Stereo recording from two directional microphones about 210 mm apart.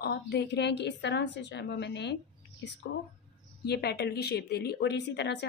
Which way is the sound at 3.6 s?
50° left (ahead or behind).